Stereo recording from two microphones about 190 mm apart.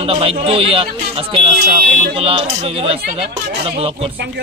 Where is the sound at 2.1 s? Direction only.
30° right (ahead or behind).